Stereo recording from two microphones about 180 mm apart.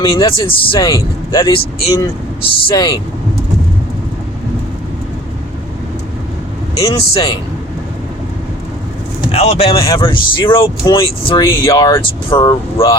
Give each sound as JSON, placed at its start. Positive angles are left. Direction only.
{"t": 0.0, "sound": "speech", "side_deg": 30}
{"t": 6.9, "sound": "speech", "side_deg": 30}
{"t": 9.3, "sound": "speech", "side_deg": 35}
{"t": 11.7, "sound": "speech", "side_deg": 15}